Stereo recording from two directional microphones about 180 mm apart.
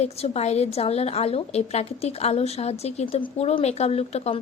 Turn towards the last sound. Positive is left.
turn(degrees=35)  # may be behind; listen again after turning